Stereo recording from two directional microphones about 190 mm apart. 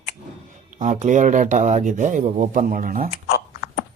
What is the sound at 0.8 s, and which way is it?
Speech, 40° right (ahead or behind).